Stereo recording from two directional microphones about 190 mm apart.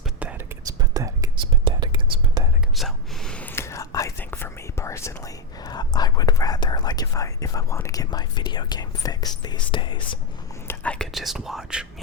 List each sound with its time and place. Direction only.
0.2 s whispering: 5° right (ahead or behind)
0.8 s whispering: 20° right (ahead or behind)
2.7 s whispering: centre (ahead or behind); by 10.2 s 25° left (ahead or behind)
10.7 s whispering: 5° left (ahead or behind)